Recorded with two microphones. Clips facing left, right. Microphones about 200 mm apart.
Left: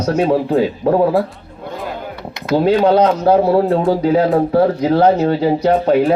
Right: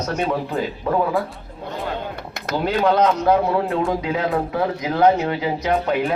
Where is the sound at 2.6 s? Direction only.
35° left (ahead or behind).